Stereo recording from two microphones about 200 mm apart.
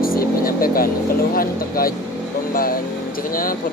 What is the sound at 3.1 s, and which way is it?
Vehicle, 45° left (ahead or behind).